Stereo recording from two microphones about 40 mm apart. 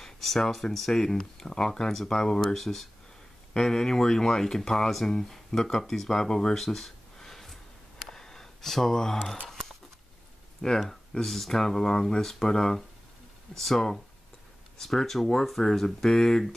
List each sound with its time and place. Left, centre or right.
0.0 s speech: centre
6.5 s a sound: centre
10.6 s speech: left
11.2 s speech: centre
15.2 s speech: centre